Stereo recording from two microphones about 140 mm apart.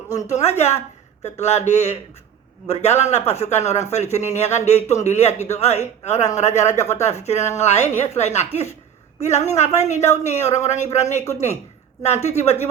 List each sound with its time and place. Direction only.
0.3 s a man's voice: 55° left (ahead or behind)